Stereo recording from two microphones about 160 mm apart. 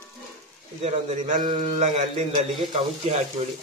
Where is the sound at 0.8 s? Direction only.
40° right (ahead or behind).